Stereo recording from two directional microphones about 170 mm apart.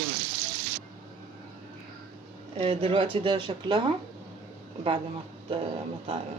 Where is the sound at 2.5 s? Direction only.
30° right (ahead or behind).